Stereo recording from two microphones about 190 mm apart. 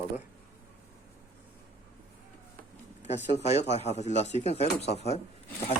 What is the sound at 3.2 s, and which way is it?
Speech, 35° left (ahead or behind).